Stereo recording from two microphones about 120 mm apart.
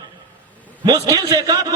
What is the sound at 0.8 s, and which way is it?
Speech, 35° right (ahead or behind).